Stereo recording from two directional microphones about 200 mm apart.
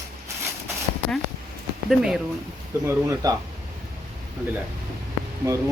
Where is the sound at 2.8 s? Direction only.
15° right (ahead or behind).